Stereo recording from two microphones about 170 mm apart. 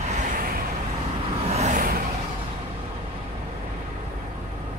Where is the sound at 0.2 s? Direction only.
55° right (ahead or behind).